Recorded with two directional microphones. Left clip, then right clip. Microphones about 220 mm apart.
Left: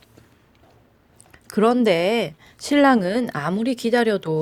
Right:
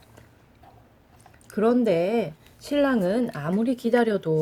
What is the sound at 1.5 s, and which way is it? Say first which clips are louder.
A woman's voice: left 4 dB; 35° left (ahead or behind).